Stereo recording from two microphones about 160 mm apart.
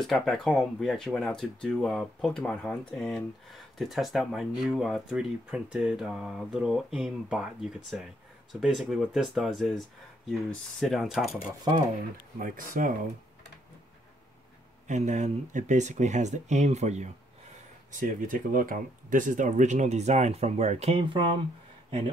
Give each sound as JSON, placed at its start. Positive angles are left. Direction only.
{"t": 0.0, "sound": "speech", "side_deg": 0}
{"t": 12.4, "sound": "speech", "side_deg": -60}
{"t": 14.9, "sound": "speech", "side_deg": -50}
{"t": 17.9, "sound": "speech", "side_deg": -55}